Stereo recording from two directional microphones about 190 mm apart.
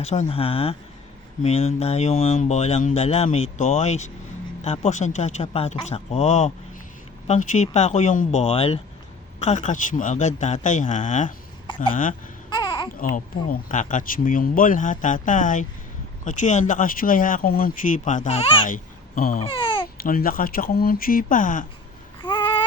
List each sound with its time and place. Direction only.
0.0 s speech: 35° left (ahead or behind)
12.5 s babbling: 25° left (ahead or behind)
13.0 s speech: 45° left (ahead or behind)
18.7 s a sound: 45° left (ahead or behind)
19.5 s babbling: 25° left (ahead or behind)
20.0 s speech: 50° left (ahead or behind)
22.2 s babbling: 25° left (ahead or behind)